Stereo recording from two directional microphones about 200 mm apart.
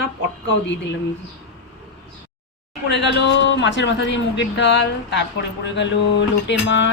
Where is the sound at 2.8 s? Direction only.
60° left (ahead or behind).